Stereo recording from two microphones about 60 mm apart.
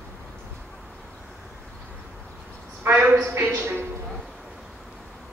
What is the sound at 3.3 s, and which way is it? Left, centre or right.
Speech, right.